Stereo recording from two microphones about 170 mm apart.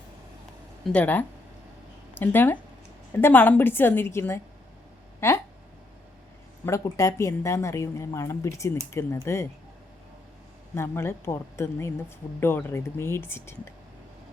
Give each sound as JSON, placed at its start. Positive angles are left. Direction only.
{"t": 0.9, "sound": "a woman's voice", "side_deg": 10}
{"t": 6.7, "sound": "a woman's voice", "side_deg": 15}
{"t": 10.8, "sound": "a woman's voice", "side_deg": 15}